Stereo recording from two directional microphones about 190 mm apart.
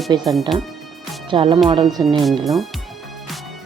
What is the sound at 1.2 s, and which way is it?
Speech, 25° right (ahead or behind).